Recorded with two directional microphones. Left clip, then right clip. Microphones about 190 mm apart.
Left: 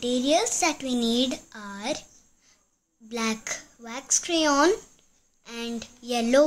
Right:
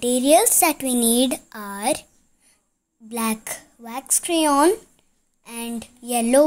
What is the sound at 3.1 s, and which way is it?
A woman's voice, 30° right (ahead or behind).